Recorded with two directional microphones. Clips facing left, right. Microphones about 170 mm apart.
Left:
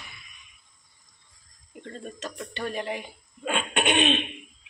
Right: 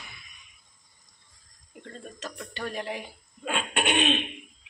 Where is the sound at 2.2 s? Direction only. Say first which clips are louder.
Left 2 dB; centre (ahead or behind).